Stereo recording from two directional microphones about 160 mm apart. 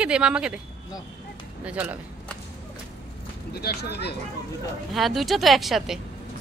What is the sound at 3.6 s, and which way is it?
Speech, 90° left.